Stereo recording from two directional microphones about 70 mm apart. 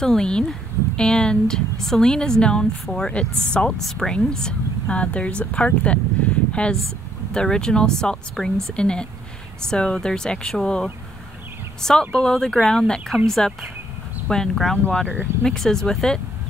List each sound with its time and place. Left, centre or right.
0.0 s a woman's voice: centre
14.9 s a woman's voice: centre
15.4 s a woman's voice: centre